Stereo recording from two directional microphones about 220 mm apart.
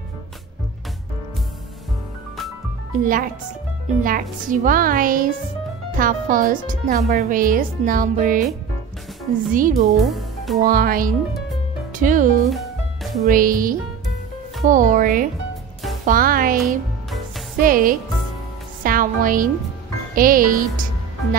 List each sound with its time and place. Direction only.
3.0 s speech: 40° right (ahead or behind)
9.5 s speech: 40° right (ahead or behind)
10.0 s speech: centre (ahead or behind)
10.6 s speech: 40° right (ahead or behind)
12.4 s music: centre (ahead or behind)
13.3 s a woman's voice: 40° right (ahead or behind)